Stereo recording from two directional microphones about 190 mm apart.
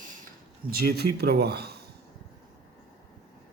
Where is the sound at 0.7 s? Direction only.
55° right (ahead or behind).